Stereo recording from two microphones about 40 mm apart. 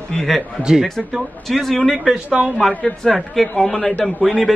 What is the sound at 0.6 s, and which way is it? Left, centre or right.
Speech, centre.